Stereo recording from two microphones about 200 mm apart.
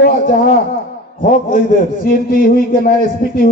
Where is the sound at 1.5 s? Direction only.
45° left (ahead or behind).